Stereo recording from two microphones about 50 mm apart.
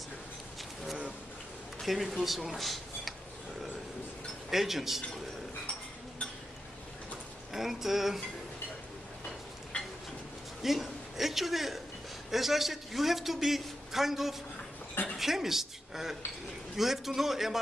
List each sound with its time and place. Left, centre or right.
1.8 s speech: centre
4.5 s a man's voice: centre
7.5 s a man's voice: centre
9.7 s a sound: centre
10.6 s a woman's voice: centre